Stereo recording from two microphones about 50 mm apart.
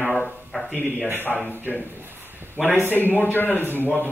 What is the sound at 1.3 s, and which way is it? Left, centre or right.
Speech, centre.